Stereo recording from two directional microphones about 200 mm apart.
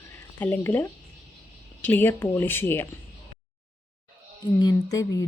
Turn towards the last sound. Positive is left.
turn(degrees=20)  # may be behind; listen again after turning